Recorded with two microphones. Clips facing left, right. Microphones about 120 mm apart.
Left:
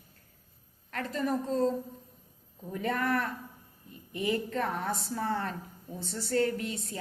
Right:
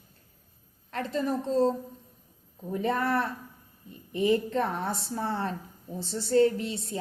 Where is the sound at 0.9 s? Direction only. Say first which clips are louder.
Right 2 dB; 25° right (ahead or behind).